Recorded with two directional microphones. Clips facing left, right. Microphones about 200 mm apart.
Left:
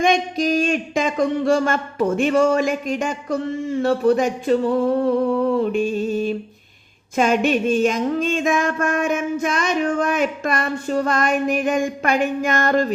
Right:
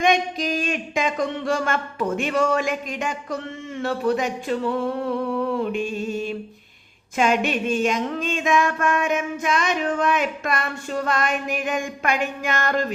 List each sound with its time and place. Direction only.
0.0 s speech: 45° left (ahead or behind)